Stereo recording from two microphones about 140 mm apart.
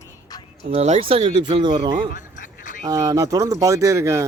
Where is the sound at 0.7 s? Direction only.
50° right (ahead or behind).